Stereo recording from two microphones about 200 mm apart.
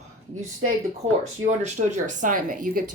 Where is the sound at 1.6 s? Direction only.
40° right (ahead or behind).